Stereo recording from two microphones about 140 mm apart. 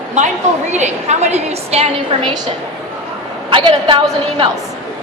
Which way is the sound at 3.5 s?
35° right (ahead or behind).